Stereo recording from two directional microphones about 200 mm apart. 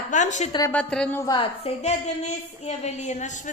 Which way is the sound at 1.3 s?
30° left (ahead or behind).